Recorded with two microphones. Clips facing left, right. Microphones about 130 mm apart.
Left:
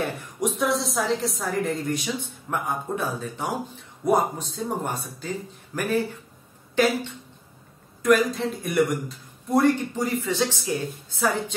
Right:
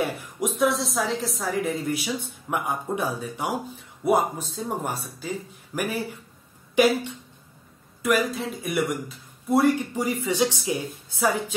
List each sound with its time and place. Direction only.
0.0 s a woman's voice: centre (ahead or behind)